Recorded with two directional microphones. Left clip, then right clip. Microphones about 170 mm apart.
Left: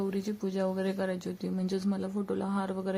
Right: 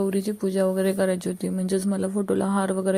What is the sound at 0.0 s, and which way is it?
Speech, 30° right (ahead or behind).